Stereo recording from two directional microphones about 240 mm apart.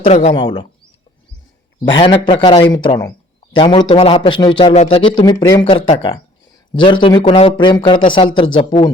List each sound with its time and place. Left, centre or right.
0.0 s a man's voice: left
2.0 s a man's voice: left